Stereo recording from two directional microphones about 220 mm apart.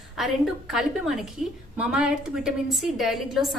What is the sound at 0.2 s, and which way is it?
A woman's voice, centre (ahead or behind).